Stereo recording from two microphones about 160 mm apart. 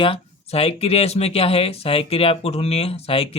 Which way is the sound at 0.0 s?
35° left (ahead or behind).